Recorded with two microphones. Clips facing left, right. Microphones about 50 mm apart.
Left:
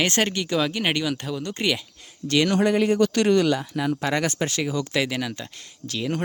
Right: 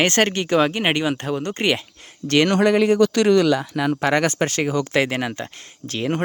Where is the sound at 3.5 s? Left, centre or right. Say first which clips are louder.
Right 4 dB; right.